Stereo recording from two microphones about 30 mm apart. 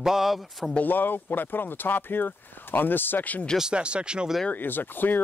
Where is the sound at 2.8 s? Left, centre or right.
Left.